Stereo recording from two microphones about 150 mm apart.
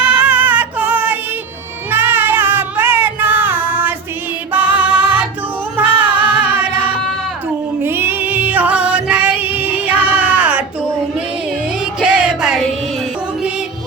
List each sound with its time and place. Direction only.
0.1 s music: 10° right (ahead or behind)
1.9 s child singing: 15° right (ahead or behind)
4.5 s music: 10° right (ahead or behind)
7.8 s music: 15° right (ahead or behind)
11.9 s a sound: 5° right (ahead or behind)